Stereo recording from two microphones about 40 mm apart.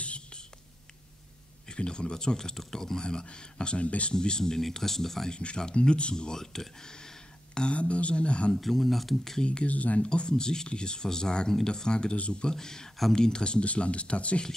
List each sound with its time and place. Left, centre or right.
0.0 s whispering: left
1.7 s speech: left
3.0 s speech: centre
4.1 s speech: centre
5.3 s speech: left
7.7 s speech: left
8.5 s speech: centre
9.4 s speech: left
9.7 s speech: left
10.0 s speech: left